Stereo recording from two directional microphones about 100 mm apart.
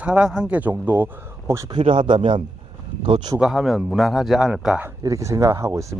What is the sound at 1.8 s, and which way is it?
Speech, 60° right (ahead or behind).